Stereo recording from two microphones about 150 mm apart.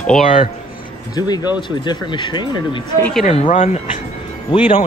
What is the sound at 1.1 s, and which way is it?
Speech, 25° left (ahead or behind).